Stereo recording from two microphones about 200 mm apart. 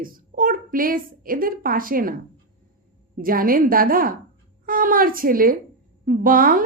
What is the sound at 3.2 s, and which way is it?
A woman's voice, 45° right (ahead or behind).